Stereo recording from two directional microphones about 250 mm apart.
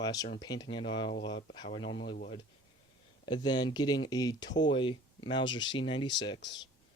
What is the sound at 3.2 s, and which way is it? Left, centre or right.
Speech, centre.